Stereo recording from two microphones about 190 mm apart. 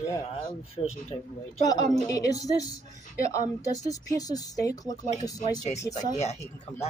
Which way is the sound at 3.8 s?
20° left (ahead or behind).